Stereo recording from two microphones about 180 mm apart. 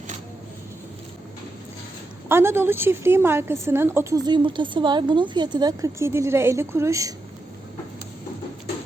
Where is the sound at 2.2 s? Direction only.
15° right (ahead or behind).